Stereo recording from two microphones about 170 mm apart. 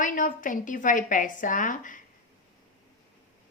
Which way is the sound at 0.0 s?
50° left (ahead or behind).